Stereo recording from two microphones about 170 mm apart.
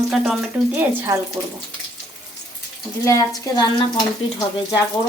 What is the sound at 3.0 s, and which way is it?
Speech, 20° left (ahead or behind).